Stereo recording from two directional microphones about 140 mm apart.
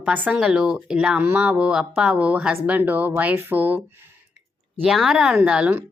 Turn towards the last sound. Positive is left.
turn(degrees=-5)  # may be behind; listen again after turning